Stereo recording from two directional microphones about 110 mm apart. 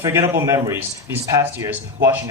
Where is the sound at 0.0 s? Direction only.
25° right (ahead or behind).